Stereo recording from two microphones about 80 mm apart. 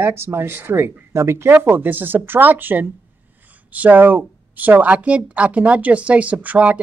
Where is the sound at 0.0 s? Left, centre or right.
Right.